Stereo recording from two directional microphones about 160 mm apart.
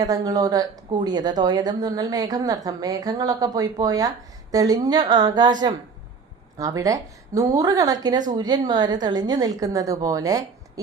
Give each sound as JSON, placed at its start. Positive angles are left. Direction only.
{"t": 0.0, "sound": "a woman's voice", "side_deg": -20}